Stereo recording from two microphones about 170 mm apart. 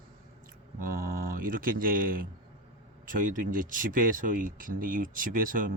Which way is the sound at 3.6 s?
50° right (ahead or behind).